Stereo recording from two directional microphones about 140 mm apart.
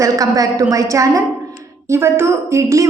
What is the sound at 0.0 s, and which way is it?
A woman's voice, 25° right (ahead or behind).